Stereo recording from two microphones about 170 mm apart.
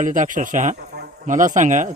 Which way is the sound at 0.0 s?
50° right (ahead or behind).